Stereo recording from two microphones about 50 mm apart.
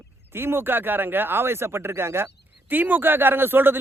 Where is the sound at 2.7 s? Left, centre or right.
Right.